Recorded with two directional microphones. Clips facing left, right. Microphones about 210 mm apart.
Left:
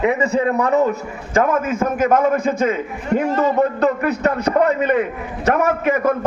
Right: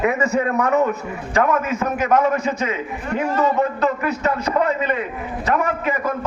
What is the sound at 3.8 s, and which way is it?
A man's voice, 60° left (ahead or behind).